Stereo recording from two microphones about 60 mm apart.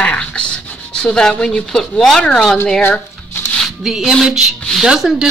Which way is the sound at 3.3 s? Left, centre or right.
Left.